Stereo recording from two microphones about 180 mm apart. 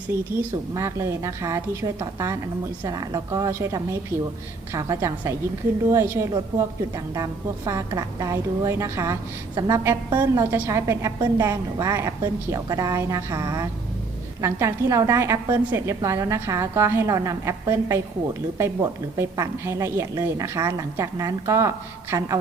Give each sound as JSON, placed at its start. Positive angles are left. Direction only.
{"t": 0.7, "sound": "a woman's voice", "side_deg": -15}